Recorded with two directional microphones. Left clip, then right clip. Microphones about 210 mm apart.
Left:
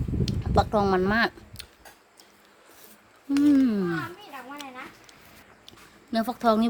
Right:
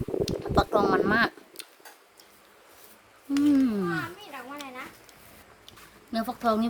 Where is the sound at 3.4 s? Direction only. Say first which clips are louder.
Left 2 dB; 20° left (ahead or behind).